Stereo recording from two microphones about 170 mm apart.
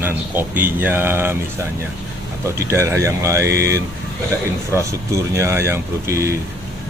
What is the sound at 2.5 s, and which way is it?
Speech, 15° right (ahead or behind).